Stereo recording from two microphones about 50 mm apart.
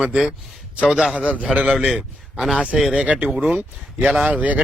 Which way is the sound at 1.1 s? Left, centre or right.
Right.